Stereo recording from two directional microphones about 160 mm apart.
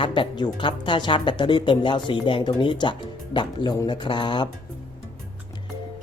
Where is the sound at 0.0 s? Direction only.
30° left (ahead or behind).